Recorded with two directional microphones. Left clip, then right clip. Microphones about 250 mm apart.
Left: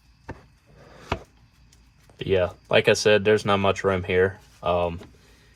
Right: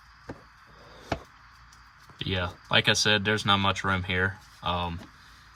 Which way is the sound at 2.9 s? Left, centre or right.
Right.